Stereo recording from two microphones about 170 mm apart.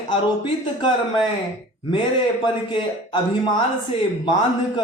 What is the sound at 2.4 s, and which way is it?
Speech, 25° left (ahead or behind).